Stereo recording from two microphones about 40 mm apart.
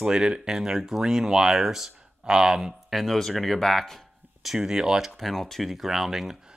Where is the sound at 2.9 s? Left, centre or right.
Centre.